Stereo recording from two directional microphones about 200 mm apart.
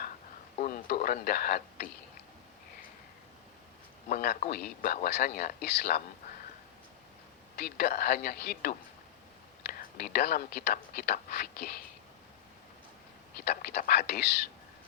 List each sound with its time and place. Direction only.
0.6 s speech: 45° left (ahead or behind)
4.1 s speech: 45° left (ahead or behind)
7.5 s speech: 50° left (ahead or behind)
13.4 s speech: 55° left (ahead or behind)